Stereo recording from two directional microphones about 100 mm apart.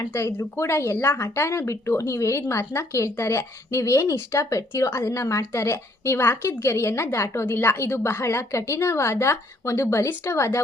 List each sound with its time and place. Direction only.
0.1 s a woman's voice: 30° left (ahead or behind)